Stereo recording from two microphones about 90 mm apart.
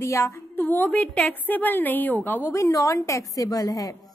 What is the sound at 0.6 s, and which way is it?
A woman's voice, 20° left (ahead or behind).